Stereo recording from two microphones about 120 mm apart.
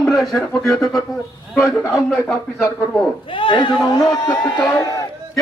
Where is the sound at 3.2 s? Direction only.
45° left (ahead or behind).